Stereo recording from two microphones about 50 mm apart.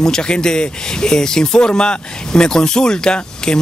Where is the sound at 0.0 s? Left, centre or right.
Centre.